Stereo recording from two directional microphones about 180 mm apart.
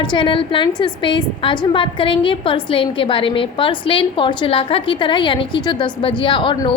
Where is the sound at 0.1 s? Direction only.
25° left (ahead or behind).